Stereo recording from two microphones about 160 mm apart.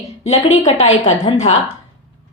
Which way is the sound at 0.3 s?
45° left (ahead or behind).